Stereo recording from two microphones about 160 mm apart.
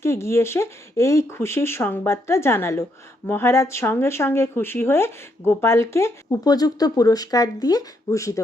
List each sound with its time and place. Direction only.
0.0 s speech: 15° left (ahead or behind)